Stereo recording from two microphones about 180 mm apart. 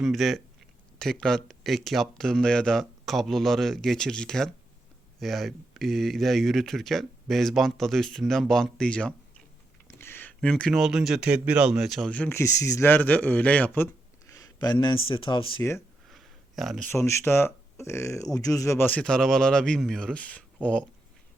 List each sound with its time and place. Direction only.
0.0 s speech: centre (ahead or behind); by 15.6 s 25° left (ahead or behind)
16.0 s a sound: centre (ahead or behind)
16.9 s speech: 15° left (ahead or behind)